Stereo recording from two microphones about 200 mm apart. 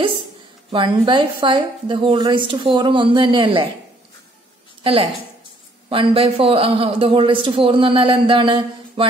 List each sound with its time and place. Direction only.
0.7 s a man's voice: 25° right (ahead or behind)
4.8 s a woman's voice: 25° right (ahead or behind)